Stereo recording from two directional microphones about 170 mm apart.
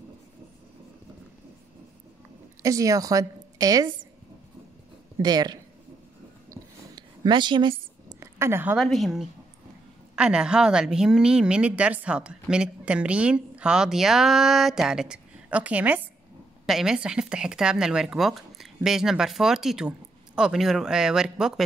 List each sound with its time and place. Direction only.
2.6 s a woman's voice: 20° right (ahead or behind)
5.2 s speech: 25° right (ahead or behind)
6.5 s a sound: 25° right (ahead or behind)
8.7 s a woman's voice: centre (ahead or behind)